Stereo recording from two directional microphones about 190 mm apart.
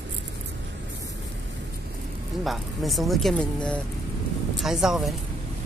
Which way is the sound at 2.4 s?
Centre (ahead or behind).